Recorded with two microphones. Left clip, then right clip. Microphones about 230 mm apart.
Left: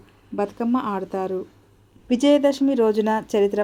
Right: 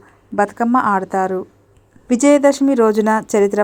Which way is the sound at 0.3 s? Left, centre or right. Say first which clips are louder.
Right 9 dB; centre.